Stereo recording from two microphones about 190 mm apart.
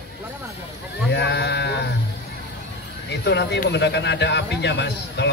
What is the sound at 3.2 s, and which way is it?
Speech, 65° left (ahead or behind).